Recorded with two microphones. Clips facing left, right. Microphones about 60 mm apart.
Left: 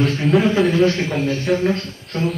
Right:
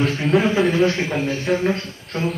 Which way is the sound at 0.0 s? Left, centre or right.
Centre.